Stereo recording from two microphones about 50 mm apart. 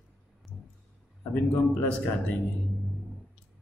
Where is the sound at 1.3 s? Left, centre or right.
Left.